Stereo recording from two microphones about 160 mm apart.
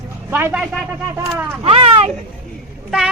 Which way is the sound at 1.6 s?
35° right (ahead or behind).